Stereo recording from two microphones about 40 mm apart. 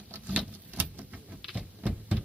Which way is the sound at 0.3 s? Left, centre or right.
Right.